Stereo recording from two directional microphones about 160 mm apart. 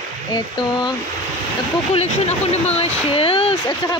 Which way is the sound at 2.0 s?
40° left (ahead or behind).